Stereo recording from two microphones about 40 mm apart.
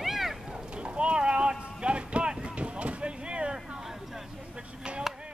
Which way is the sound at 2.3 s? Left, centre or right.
Right.